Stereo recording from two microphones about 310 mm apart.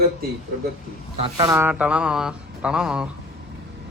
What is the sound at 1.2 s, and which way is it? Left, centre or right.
Speech, centre.